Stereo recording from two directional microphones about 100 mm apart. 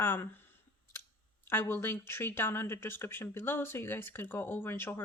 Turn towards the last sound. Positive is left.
turn(degrees=25)  # may be behind; listen again after turning